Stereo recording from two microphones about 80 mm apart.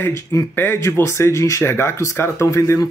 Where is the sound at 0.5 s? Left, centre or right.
Left.